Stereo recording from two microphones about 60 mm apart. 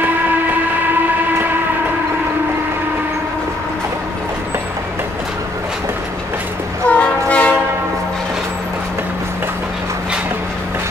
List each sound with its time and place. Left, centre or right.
6.9 s train: left